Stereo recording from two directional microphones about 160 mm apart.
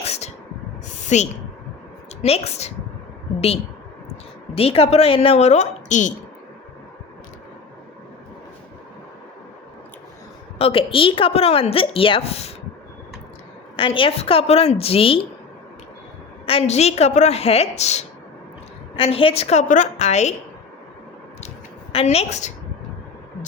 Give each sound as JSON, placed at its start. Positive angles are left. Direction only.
{"t": 0.0, "sound": "a sound", "side_deg": 40}
{"t": 2.2, "sound": "a woman's voice", "side_deg": 40}
{"t": 4.5, "sound": "a woman's voice", "side_deg": 40}
{"t": 10.6, "sound": "a woman's voice", "side_deg": 35}
{"t": 13.7, "sound": "a woman's voice", "side_deg": 30}
{"t": 16.5, "sound": "a woman's voice", "side_deg": 40}
{"t": 21.9, "sound": "a woman's voice", "side_deg": 40}